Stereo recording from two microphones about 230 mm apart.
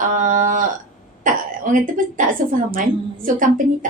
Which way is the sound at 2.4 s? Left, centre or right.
Right.